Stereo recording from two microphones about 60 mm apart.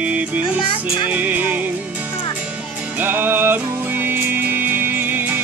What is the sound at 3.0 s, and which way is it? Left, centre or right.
Music, right.